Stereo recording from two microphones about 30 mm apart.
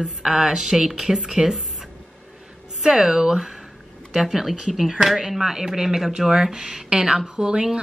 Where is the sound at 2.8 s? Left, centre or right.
Centre.